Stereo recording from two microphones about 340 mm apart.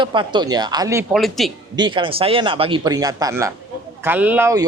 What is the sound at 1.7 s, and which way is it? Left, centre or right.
Speech, centre.